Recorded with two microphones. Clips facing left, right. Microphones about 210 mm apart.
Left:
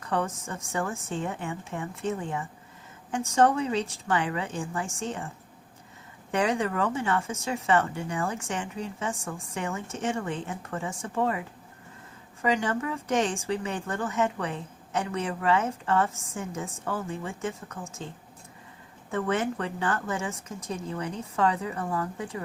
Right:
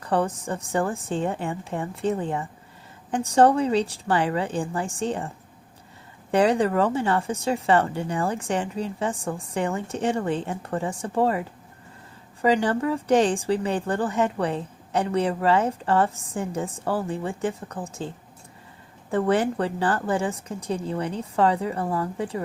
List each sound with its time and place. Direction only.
0.0 s speech: 35° right (ahead or behind)
6.3 s speech: 35° right (ahead or behind)
19.1 s speech: 35° right (ahead or behind)